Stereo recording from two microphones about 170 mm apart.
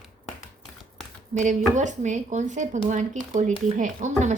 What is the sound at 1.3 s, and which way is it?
Speech, 45° right (ahead or behind).